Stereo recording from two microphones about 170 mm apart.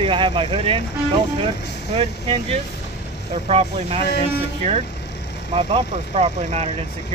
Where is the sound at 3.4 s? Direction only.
35° right (ahead or behind).